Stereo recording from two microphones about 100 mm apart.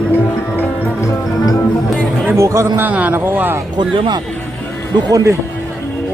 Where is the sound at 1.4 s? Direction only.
35° left (ahead or behind).